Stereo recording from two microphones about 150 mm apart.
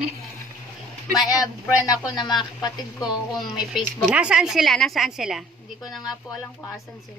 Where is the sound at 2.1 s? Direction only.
30° left (ahead or behind).